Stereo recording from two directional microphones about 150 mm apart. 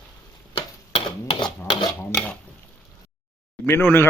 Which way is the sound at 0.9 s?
35° left (ahead or behind).